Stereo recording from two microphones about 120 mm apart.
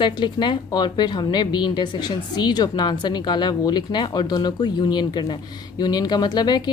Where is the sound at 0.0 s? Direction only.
40° left (ahead or behind).